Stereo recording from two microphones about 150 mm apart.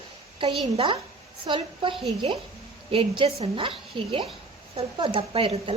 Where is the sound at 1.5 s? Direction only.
35° right (ahead or behind).